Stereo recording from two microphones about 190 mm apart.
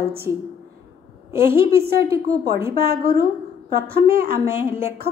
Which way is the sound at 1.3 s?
50° right (ahead or behind).